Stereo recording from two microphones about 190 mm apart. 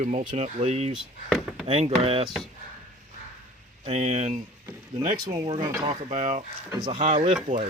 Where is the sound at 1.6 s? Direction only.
30° right (ahead or behind).